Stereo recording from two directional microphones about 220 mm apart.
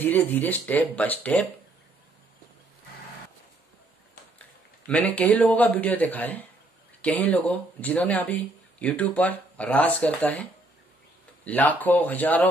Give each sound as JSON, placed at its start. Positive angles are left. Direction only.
{"t": 0.0, "sound": "speech", "side_deg": 10}
{"t": 4.8, "sound": "speech", "side_deg": 5}
{"t": 11.4, "sound": "speech", "side_deg": 5}